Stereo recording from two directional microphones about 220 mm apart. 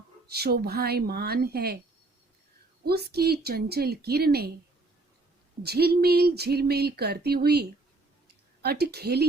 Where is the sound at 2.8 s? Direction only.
45° right (ahead or behind).